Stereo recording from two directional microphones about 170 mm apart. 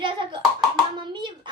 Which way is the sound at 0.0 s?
30° right (ahead or behind).